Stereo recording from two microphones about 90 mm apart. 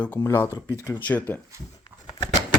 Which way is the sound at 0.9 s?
20° left (ahead or behind).